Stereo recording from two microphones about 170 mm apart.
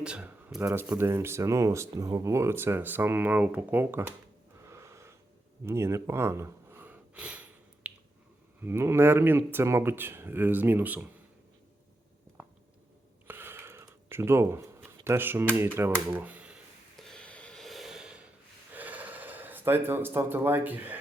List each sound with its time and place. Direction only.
0.0 s speech: 5° right (ahead or behind)
4.6 s wheeze: 15° right (ahead or behind)
5.6 s gasp: 15° right (ahead or behind)
8.6 s speech: 15° right (ahead or behind)
13.2 s gasp: 15° right (ahead or behind)
15.5 s speech: 15° right (ahead or behind)
17.0 s snort: 5° left (ahead or behind)
18.7 s gasp: 10° right (ahead or behind)